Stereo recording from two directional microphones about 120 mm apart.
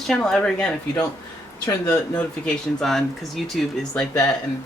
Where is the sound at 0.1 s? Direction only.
5° left (ahead or behind).